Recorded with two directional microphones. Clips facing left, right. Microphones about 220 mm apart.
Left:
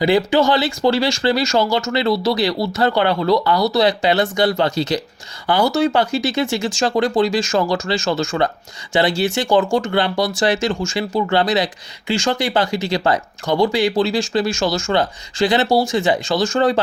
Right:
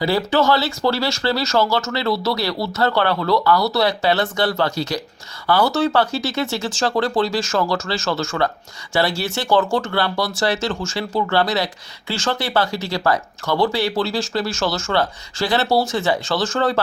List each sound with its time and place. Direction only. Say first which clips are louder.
0.3 s speech: left 2 dB; 15° left (ahead or behind)